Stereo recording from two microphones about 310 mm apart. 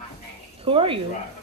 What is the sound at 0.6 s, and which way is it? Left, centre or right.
Speech, centre.